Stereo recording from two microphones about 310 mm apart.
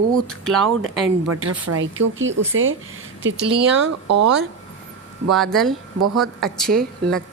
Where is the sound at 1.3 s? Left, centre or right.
Right.